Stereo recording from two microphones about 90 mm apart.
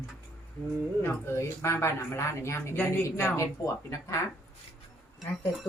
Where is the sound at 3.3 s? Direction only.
35° left (ahead or behind).